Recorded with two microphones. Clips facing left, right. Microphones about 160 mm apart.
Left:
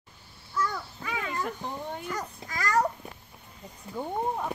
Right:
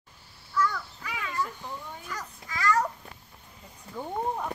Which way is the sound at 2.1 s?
45° left (ahead or behind).